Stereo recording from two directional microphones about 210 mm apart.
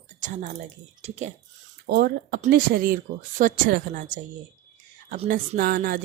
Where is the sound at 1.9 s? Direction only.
50° right (ahead or behind).